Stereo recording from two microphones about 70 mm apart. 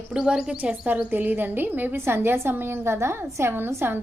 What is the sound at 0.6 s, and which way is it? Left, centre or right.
A woman's voice, right.